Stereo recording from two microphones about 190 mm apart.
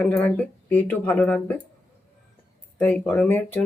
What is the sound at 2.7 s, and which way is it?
Speech, 10° left (ahead or behind).